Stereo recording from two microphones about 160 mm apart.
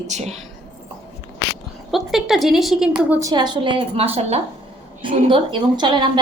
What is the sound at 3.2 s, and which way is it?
A woman's voice, 25° right (ahead or behind).